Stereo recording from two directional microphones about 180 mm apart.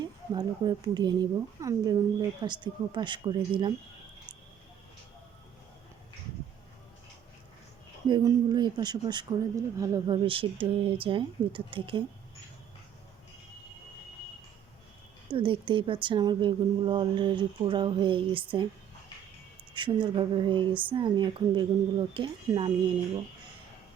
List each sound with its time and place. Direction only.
0.3 s speech: 25° right (ahead or behind)
8.0 s speech: 25° right (ahead or behind)
10.2 s speech: 30° right (ahead or behind)
15.3 s speech: 30° right (ahead or behind)
19.7 s speech: 25° right (ahead or behind)